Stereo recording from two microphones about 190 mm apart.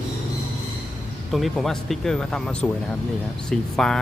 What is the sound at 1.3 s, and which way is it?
Speech, centre (ahead or behind).